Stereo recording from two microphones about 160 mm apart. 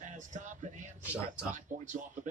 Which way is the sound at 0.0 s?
50° right (ahead or behind).